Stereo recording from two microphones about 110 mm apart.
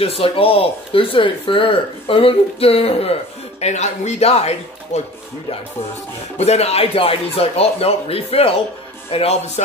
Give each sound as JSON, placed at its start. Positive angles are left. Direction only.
{"t": 0.0, "sound": "speech", "side_deg": 60}
{"t": 3.6, "sound": "speech", "side_deg": 90}
{"t": 6.3, "sound": "speech", "side_deg": 70}